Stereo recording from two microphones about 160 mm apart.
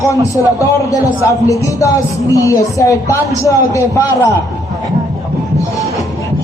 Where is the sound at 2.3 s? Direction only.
20° left (ahead or behind).